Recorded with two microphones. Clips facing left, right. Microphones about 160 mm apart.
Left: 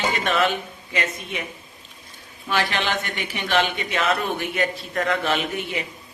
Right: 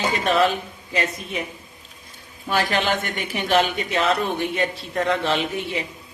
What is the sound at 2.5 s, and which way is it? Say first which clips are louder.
A man's voice: right 2 dB; 40° right (ahead or behind).